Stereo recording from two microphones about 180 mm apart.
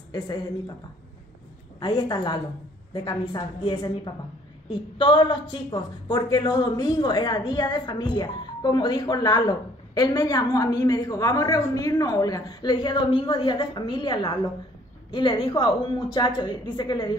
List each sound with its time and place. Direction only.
0.1 s a woman's voice: 20° left (ahead or behind)
1.8 s a woman's voice: 25° left (ahead or behind)